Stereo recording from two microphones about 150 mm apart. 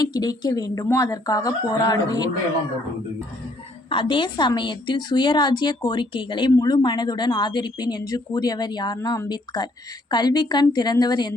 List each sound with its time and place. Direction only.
0.0 s a woman's voice: 25° left (ahead or behind)
3.8 s a woman's voice: 35° left (ahead or behind)